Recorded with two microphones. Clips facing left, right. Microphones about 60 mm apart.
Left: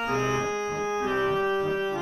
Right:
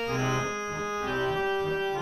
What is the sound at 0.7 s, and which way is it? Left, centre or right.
Organ, left.